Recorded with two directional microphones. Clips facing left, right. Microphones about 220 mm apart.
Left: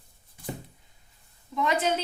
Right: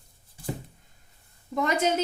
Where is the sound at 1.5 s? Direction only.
45° right (ahead or behind).